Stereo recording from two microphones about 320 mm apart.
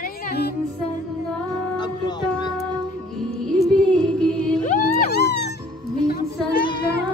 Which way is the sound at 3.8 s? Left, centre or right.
Centre.